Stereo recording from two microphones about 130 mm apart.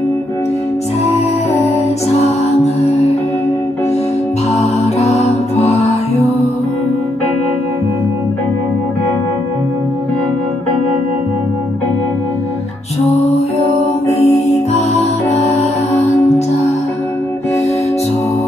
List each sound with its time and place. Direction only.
2.6 s music: 55° left (ahead or behind)
4.6 s music: 55° left (ahead or behind)
14.1 s music: 55° left (ahead or behind)